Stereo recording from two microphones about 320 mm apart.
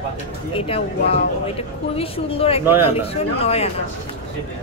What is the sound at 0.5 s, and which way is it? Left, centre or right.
A woman's voice, centre.